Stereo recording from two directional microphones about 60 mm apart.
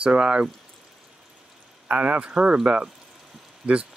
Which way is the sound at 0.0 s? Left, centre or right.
Centre.